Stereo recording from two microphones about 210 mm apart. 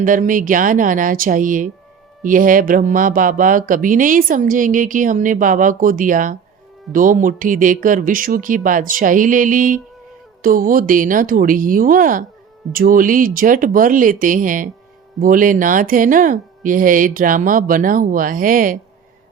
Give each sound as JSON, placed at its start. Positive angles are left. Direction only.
{"t": 0.0, "sound": "speech", "side_deg": -40}